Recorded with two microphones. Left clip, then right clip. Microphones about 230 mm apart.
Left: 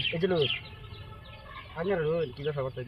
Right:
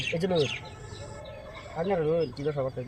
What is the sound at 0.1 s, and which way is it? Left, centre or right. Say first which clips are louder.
Speech: right 4 dB; centre.